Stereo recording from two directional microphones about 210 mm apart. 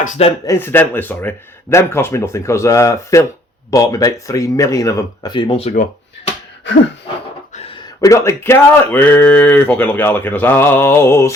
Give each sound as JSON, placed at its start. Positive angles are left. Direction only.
{"t": 0.0, "sound": "speech", "side_deg": 30}
{"t": 0.4, "sound": "speech", "side_deg": 10}
{"t": 7.5, "sound": "a sound", "side_deg": 30}
{"t": 8.0, "sound": "speech", "side_deg": 15}